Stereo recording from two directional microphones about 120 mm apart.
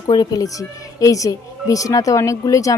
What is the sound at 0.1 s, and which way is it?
A woman's voice, 35° left (ahead or behind).